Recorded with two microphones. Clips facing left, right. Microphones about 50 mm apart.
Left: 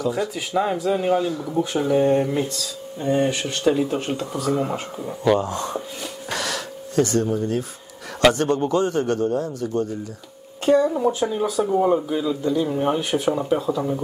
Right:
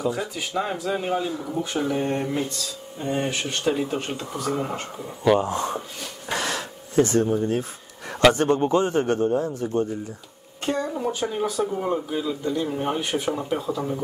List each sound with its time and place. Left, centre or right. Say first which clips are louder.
0.4 s speech: left 5 dB; centre
1.2 s speech: left 3 dB; centre
1.6 s speech: left 6 dB; centre
5.4 s a man's voice: right 1 dB; right
6.3 s a sound: right 1 dB; right
8.4 s a man's voice: even; right
10.6 s a woman's voice: left 8 dB; centre